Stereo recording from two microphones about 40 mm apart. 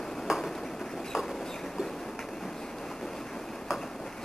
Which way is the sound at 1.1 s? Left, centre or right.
Centre.